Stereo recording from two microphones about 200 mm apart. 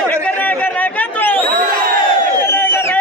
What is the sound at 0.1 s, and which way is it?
Chatter, 5° left (ahead or behind).